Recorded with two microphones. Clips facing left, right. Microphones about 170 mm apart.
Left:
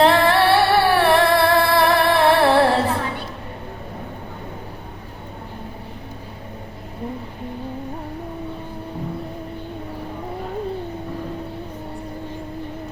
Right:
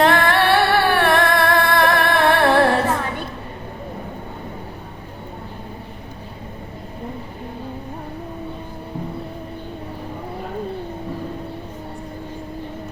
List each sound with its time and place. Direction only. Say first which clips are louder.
0.0 s music: left 1 dB; 30° left (ahead or behind)